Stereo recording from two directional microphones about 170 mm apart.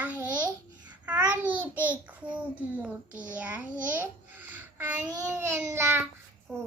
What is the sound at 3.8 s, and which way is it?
Babbling, 10° right (ahead or behind).